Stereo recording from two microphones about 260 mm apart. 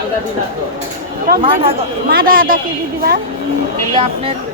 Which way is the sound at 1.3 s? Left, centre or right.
Right.